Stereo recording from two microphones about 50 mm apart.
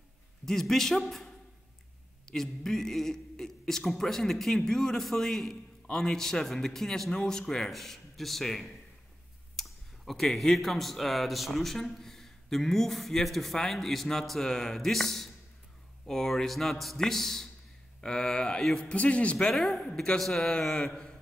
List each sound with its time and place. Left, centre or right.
0.5 s a man's voice: centre
2.2 s a man's voice: centre
18.9 s a man's voice: left
19.5 s a man's voice: centre